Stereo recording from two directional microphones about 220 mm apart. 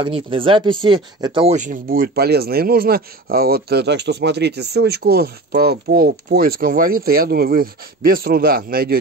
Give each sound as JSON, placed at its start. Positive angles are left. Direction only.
{"t": 0.0, "sound": "speech", "side_deg": -25}